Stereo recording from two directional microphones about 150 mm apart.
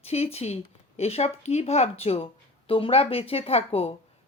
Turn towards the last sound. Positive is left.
turn(degrees=40)  # may be behind; listen again after turning